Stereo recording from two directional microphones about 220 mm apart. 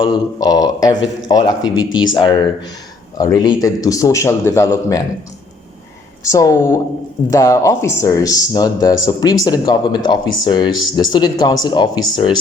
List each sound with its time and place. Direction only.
0.0 s speech: 20° left (ahead or behind)
6.3 s speech: 15° left (ahead or behind)